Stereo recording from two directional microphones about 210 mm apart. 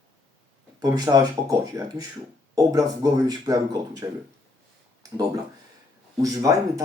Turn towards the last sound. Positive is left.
turn(degrees=-15)  # may be behind; listen again after turning